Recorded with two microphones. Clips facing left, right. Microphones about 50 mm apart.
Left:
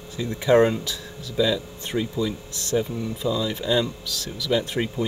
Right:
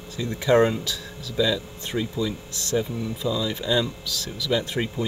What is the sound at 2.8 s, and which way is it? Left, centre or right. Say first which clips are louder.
Speech: left 1 dB; centre.